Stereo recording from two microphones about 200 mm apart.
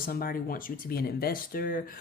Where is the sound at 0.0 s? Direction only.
45° left (ahead or behind).